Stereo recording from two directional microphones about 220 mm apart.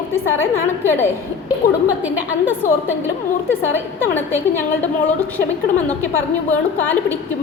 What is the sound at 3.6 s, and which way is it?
Speech, 60° left (ahead or behind).